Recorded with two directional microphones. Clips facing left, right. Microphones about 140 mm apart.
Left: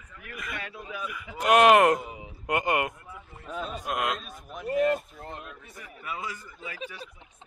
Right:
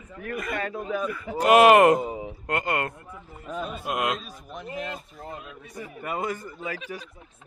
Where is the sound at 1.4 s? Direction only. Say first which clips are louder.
Right 3 dB; centre (ahead or behind).